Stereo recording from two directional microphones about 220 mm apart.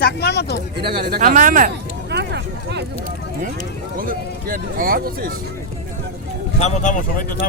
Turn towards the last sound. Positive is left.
turn(degrees=35)  # may be behind; listen again after turning